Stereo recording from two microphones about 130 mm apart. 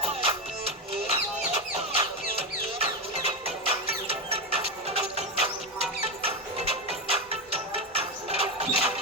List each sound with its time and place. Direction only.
0.0 s music: 50° right (ahead or behind)